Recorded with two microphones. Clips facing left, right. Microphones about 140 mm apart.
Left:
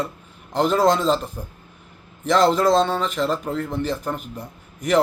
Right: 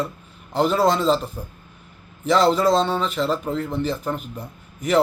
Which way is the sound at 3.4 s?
10° right (ahead or behind).